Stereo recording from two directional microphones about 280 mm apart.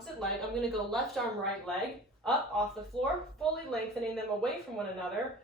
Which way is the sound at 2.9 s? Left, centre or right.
Centre.